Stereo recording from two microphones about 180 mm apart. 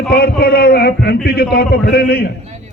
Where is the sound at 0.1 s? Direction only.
60° left (ahead or behind).